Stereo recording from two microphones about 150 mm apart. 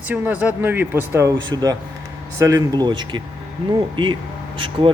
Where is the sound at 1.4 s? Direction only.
25° right (ahead or behind).